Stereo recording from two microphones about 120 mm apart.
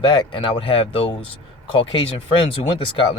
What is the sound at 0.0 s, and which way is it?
Speech, 40° left (ahead or behind).